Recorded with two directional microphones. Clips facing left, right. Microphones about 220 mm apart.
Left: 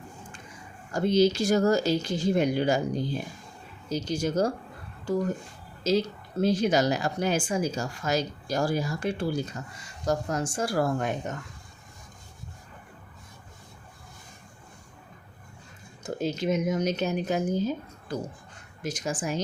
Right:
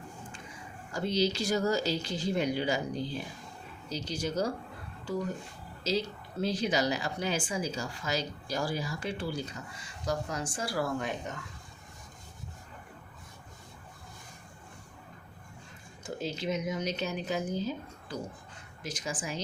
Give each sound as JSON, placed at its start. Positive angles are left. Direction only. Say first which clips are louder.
{"t": 0.9, "sound": "speech", "louder": "left 7 dB", "side_deg": 50}
{"t": 5.8, "sound": "speech", "louder": "left 6 dB", "side_deg": 50}
{"t": 16.0, "sound": "speech", "louder": "left 6 dB", "side_deg": 45}